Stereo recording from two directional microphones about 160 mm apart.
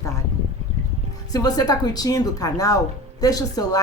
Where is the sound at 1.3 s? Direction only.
25° left (ahead or behind).